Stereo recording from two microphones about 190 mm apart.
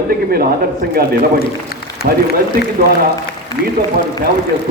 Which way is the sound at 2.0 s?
55° right (ahead or behind).